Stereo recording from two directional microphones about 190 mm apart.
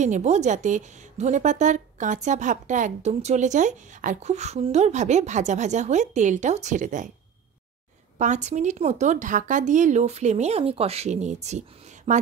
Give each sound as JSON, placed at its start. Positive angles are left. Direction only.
{"t": 0.0, "sound": "a woman's voice", "side_deg": -40}
{"t": 8.2, "sound": "a woman's voice", "side_deg": -40}